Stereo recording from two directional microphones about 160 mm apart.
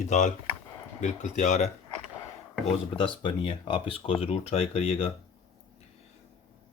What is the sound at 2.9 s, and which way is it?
Speech, 30° left (ahead or behind).